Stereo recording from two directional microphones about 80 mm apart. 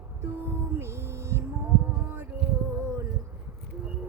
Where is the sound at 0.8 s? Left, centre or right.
Right.